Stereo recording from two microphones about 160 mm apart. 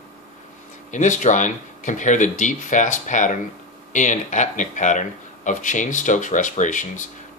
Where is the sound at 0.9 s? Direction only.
50° left (ahead or behind).